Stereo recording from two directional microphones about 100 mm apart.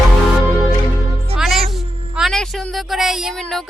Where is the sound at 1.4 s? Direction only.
Centre (ahead or behind).